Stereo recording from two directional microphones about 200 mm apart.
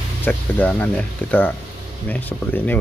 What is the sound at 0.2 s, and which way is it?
Speech, 5° left (ahead or behind).